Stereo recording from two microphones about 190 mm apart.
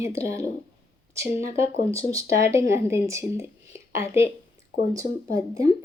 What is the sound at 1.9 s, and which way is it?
Speech, 15° right (ahead or behind).